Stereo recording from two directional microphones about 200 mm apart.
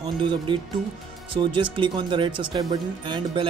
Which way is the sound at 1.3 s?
25° right (ahead or behind).